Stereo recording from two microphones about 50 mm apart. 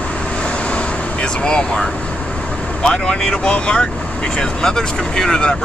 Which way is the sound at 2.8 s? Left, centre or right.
Centre.